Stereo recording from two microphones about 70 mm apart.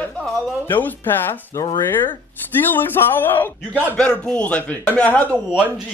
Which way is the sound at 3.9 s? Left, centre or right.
Centre.